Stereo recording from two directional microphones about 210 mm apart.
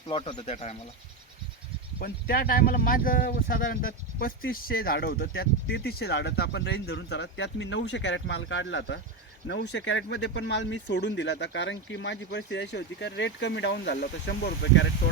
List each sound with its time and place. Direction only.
0.1 s speech: 20° left (ahead or behind)
2.0 s speech: 45° left (ahead or behind)